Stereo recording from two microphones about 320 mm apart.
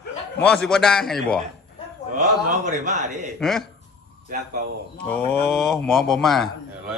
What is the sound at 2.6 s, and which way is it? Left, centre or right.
Speech, right.